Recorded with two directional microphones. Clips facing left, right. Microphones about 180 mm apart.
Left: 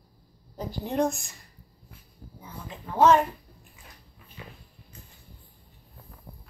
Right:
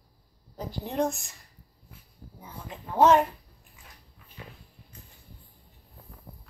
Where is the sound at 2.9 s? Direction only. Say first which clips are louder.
Even; 20° right (ahead or behind).